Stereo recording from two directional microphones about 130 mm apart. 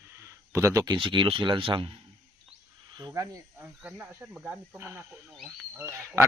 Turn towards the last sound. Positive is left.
turn(degrees=-20)  # may be behind; listen again after turning